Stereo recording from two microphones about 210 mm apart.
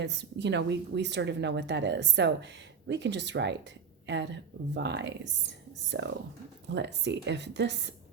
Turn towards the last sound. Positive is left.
turn(degrees=-55)  # may be behind; listen again after turning